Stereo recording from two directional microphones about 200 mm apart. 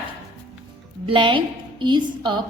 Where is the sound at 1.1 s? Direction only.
25° right (ahead or behind).